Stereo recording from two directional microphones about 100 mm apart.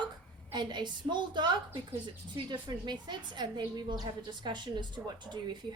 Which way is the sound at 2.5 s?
50° right (ahead or behind).